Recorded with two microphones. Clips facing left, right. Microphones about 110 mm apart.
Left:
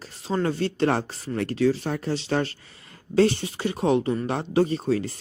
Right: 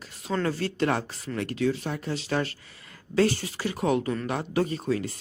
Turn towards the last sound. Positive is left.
turn(degrees=30)  # may be behind; listen again after turning